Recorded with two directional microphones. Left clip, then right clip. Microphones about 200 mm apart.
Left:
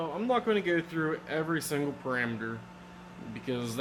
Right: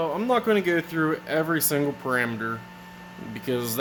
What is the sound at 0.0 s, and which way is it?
Speech, 65° right (ahead or behind).